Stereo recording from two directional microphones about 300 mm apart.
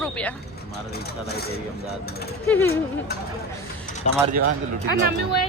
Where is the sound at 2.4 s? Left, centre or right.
Centre.